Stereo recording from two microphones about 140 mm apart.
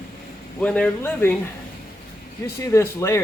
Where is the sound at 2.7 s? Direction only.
20° left (ahead or behind).